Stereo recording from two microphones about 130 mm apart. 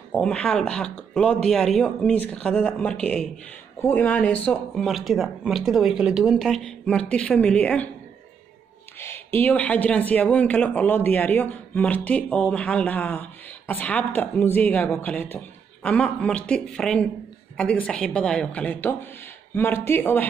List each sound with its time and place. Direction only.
0.1 s speech: 5° left (ahead or behind)
8.9 s speech: 20° left (ahead or behind)